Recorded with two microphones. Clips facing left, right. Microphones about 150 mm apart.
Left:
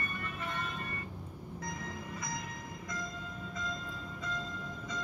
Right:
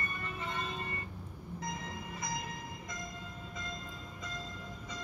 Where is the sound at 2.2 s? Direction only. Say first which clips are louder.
Right 3 dB; 25° right (ahead or behind).